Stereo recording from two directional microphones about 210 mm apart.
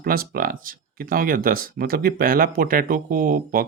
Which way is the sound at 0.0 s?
45° right (ahead or behind).